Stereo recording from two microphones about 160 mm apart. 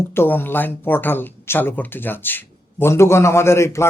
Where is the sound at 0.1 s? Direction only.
15° left (ahead or behind).